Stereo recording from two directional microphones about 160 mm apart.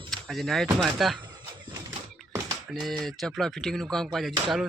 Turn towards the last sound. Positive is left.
turn(degrees=0)  # may be behind; listen again after turning